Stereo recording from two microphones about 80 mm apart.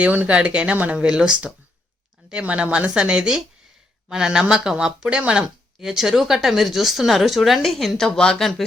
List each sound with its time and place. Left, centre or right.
0.0 s speech: centre